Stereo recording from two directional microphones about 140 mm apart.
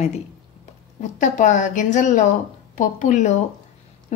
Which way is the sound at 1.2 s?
65° left (ahead or behind).